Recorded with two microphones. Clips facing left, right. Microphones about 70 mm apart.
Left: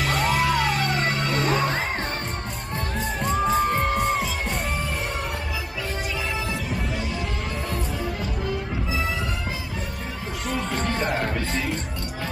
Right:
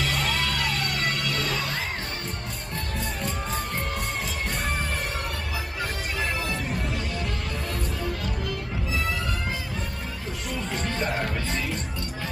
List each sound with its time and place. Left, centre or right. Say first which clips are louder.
0.0 s music: left 5 dB; centre; by 1.3 s left
1.3 s music: left 6 dB; left
3.2 s music: left 13 dB; left
8.2 s music: left 3 dB; left
10.8 s music: left 4 dB; left